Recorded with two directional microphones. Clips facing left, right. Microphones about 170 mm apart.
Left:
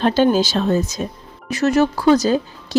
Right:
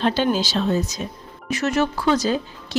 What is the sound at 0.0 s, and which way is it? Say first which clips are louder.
Speech: left 5 dB; 45° left (ahead or behind).